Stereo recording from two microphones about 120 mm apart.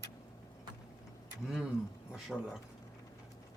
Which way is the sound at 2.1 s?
5° right (ahead or behind).